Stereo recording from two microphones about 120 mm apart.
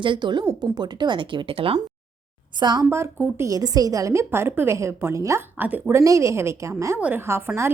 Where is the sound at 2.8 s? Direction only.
20° right (ahead or behind).